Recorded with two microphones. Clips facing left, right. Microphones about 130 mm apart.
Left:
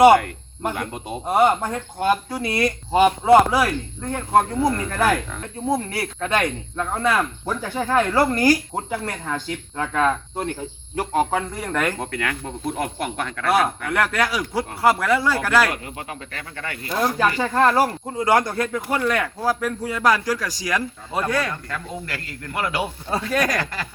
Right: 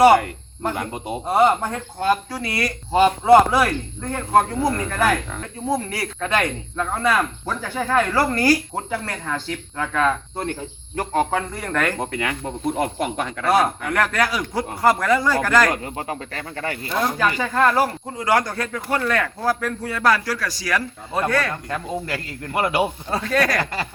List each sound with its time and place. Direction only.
0.7 s speech: 5° right (ahead or behind)
1.3 s a man's voice: 5° left (ahead or behind)
2.0 s speech: 20° left (ahead or behind)
4.5 s a man's voice: 5° right (ahead or behind)
5.6 s speech: 25° left (ahead or behind)
11.9 s speech: 10° right (ahead or behind)
13.5 s a man's voice: centre (ahead or behind)
15.7 s speech: 35° right (ahead or behind)
17.2 s speech: 25° left (ahead or behind)
21.7 s speech: 25° right (ahead or behind)
23.0 s speech: 10° left (ahead or behind)
23.6 s speech: 30° right (ahead or behind)